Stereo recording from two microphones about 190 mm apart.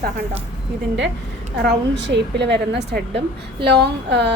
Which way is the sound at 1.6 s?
65° right (ahead or behind).